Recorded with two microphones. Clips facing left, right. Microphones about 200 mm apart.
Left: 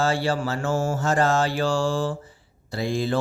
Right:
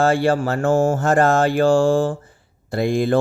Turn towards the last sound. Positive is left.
turn(degrees=-55)  # may be behind; listen again after turning